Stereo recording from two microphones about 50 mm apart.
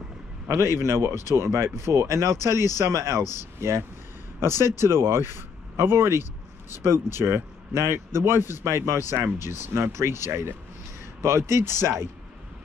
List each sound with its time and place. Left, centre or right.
0.5 s speech: right
2.9 s speech: right
4.4 s a man's voice: right
8.6 s a man's voice: right